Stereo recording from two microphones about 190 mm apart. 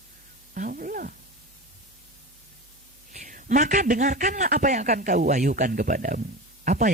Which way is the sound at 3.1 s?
40° right (ahead or behind).